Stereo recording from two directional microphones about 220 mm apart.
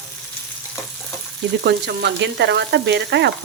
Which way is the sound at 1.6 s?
50° right (ahead or behind).